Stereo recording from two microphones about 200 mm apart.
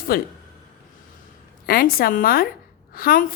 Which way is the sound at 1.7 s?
45° left (ahead or behind).